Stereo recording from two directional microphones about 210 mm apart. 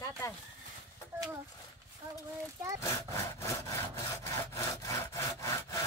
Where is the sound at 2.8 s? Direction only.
15° left (ahead or behind).